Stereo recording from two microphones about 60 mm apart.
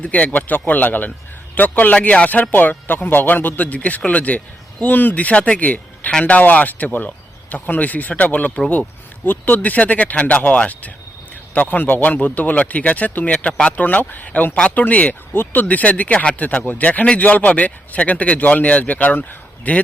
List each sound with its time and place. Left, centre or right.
0.0 s speech: left